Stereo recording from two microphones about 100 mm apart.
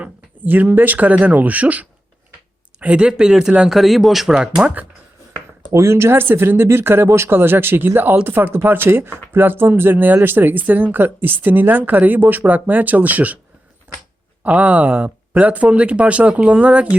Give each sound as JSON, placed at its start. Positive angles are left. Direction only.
{"t": 0.0, "sound": "speech", "side_deg": -15}
{"t": 5.7, "sound": "speech", "side_deg": -30}
{"t": 14.4, "sound": "speech", "side_deg": -15}